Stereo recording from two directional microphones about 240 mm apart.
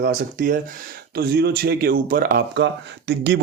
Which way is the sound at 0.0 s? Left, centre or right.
Right.